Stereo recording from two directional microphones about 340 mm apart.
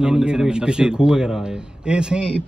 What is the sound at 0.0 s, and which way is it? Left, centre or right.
A man's voice, centre.